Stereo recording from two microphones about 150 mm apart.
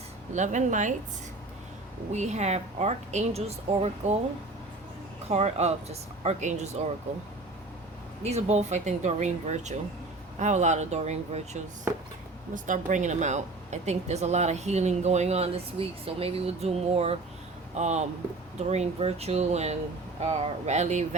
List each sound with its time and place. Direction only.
0.3 s speech: 55° right (ahead or behind)
2.1 s speech: 50° right (ahead or behind)
5.3 s speech: 45° right (ahead or behind)
8.2 s speech: 45° right (ahead or behind)
12.5 s speech: 60° right (ahead or behind)